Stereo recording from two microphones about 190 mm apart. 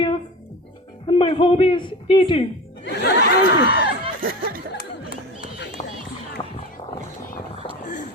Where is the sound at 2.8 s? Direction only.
65° left (ahead or behind).